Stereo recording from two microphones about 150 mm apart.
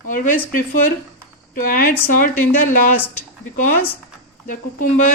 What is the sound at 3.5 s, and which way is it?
Speech, 60° left (ahead or behind).